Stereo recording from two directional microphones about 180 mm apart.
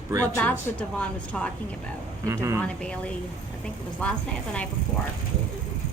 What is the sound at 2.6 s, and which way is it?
A woman's voice, 5° left (ahead or behind).